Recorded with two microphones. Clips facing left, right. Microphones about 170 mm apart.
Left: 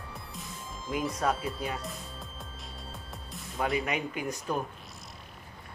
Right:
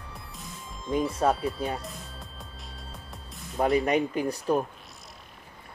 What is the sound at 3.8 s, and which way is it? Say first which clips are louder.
Speech: right 7 dB; 35° right (ahead or behind).